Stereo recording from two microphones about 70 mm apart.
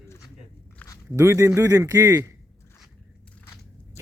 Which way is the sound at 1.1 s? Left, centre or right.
Right.